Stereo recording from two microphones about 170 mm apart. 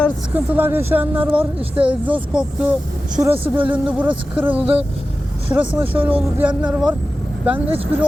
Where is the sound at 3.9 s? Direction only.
10° right (ahead or behind).